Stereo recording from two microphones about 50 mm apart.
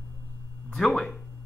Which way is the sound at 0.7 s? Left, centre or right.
Centre.